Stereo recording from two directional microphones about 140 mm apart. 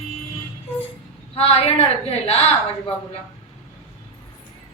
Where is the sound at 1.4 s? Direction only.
45° left (ahead or behind).